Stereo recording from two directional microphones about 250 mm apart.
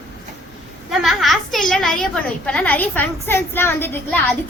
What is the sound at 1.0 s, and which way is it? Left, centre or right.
A woman's voice, centre.